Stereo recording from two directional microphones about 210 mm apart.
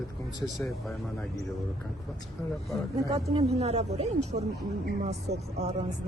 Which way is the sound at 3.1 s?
30° right (ahead or behind).